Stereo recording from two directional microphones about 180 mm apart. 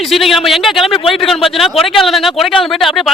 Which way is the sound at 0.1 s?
Centre (ahead or behind).